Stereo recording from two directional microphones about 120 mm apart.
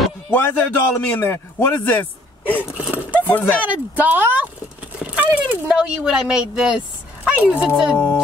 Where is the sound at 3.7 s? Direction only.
15° right (ahead or behind).